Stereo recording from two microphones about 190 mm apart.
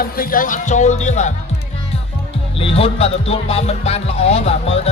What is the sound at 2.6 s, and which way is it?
Music, 30° left (ahead or behind).